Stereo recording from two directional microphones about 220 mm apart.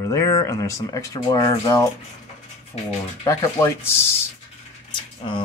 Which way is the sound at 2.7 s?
30° left (ahead or behind).